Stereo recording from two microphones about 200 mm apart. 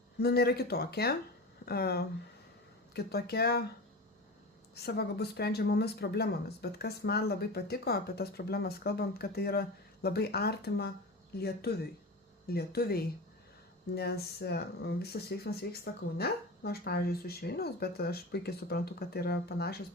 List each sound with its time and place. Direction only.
0.2 s speech: 55° left (ahead or behind)
4.7 s speech: 50° left (ahead or behind)